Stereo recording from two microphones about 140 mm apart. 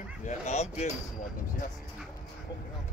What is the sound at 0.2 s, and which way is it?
Speech, 55° left (ahead or behind).